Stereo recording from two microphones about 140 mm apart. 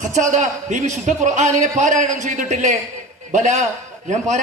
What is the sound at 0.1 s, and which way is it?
A man's voice, 55° right (ahead or behind).